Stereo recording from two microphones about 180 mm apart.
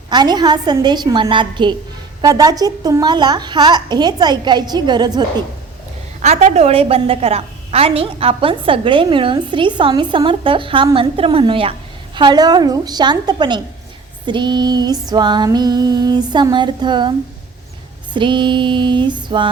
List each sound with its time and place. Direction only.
0.1 s a woman's voice: 25° right (ahead or behind)
6.2 s a woman's voice: 40° right (ahead or behind)
18.1 s a woman's voice: 25° right (ahead or behind)